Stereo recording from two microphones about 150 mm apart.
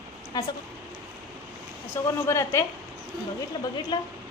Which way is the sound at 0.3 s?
25° left (ahead or behind).